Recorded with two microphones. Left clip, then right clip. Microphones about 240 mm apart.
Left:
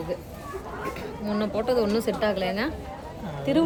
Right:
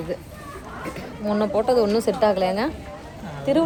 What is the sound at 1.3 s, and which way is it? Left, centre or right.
Speech, centre.